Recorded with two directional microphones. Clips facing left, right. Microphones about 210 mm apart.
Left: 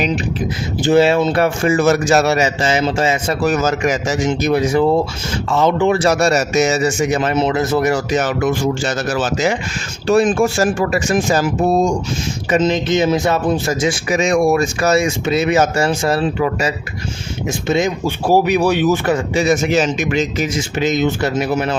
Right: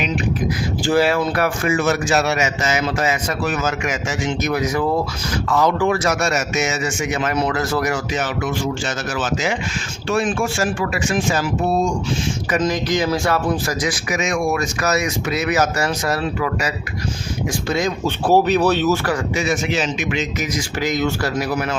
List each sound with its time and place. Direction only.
0.8 s a man's voice: 20° left (ahead or behind)
3.4 s a man's voice: 40° left (ahead or behind)
8.1 s speech: 45° left (ahead or behind)
12.5 s a man's voice: 25° left (ahead or behind)
18.0 s a man's voice: 10° left (ahead or behind); by 20.5 s 40° left (ahead or behind)
20.6 s a man's voice: 20° left (ahead or behind)